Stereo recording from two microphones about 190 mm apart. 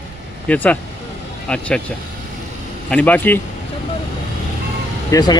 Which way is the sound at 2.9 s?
5° left (ahead or behind).